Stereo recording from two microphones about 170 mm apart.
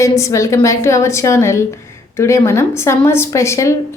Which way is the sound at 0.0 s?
15° left (ahead or behind).